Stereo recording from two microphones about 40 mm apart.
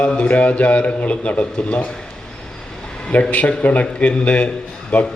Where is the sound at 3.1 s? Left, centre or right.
Left.